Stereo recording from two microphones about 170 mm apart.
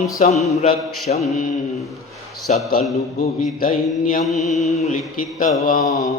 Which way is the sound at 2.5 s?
45° left (ahead or behind).